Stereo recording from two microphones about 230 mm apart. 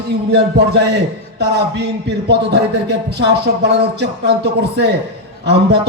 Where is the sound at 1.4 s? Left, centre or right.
Right.